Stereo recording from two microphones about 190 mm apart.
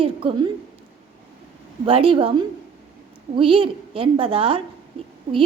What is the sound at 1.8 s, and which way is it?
A woman's voice, 30° right (ahead or behind).